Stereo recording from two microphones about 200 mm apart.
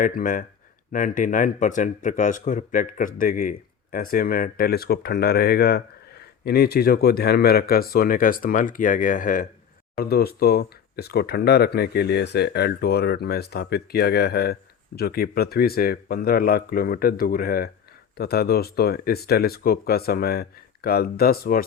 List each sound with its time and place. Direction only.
0.0 s speech: 40° left (ahead or behind)